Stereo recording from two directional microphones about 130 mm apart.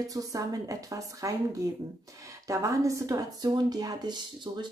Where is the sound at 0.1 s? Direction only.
25° right (ahead or behind).